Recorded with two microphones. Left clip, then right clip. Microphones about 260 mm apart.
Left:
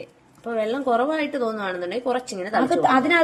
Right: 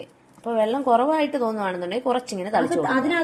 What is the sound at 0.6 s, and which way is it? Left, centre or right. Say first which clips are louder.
A woman's voice: right 2 dB; centre.